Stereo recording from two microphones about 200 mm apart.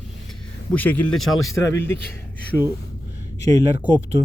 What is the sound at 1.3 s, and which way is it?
Speech, 90° left.